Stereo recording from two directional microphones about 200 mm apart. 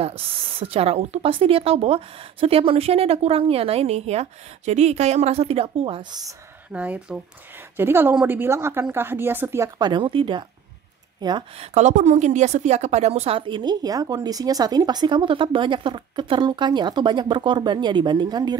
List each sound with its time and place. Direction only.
0.0 s a woman's voice: 30° right (ahead or behind)
6.7 s a woman's voice: 5° right (ahead or behind)